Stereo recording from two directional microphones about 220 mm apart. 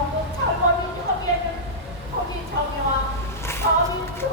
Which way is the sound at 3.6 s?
40° right (ahead or behind).